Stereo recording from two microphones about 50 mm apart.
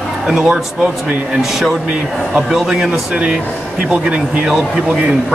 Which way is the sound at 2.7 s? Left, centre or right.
Centre.